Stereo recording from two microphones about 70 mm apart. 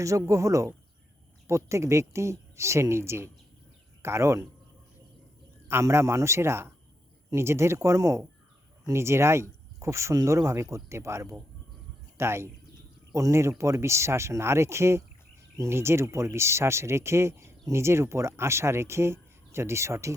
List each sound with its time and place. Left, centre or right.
0.0 s speech: right
5.8 s speech: right